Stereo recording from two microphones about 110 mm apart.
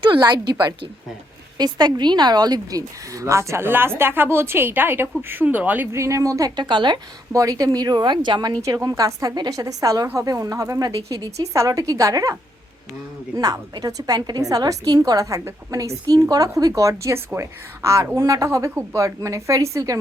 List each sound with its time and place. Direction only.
0.0 s a woman's voice: 45° right (ahead or behind)
1.5 s a woman's voice: 40° right (ahead or behind)
6.6 s speech: 45° right (ahead or behind)
7.3 s a woman's voice: 30° right (ahead or behind)
8.6 s a woman's voice: 30° right (ahead or behind)